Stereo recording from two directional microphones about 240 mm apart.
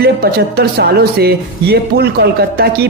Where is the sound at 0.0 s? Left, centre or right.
Right.